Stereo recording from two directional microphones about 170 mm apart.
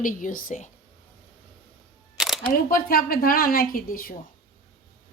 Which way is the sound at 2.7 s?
60° left (ahead or behind).